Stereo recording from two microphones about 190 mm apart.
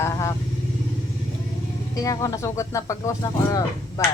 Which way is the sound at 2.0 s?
20° left (ahead or behind).